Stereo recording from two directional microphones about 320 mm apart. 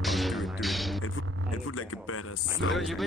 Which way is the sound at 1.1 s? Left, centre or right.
Left.